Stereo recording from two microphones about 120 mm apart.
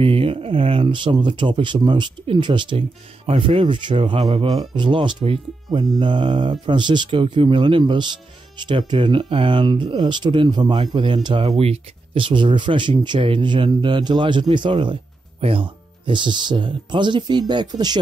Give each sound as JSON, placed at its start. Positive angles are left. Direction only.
{"t": 0.0, "sound": "speech", "side_deg": -50}
{"t": 11.5, "sound": "speech", "side_deg": -55}